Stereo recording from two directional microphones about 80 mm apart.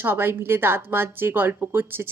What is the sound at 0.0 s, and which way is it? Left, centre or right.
A woman's voice, right.